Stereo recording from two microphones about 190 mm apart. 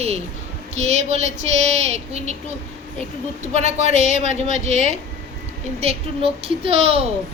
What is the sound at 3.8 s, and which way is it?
Speech, 40° left (ahead or behind).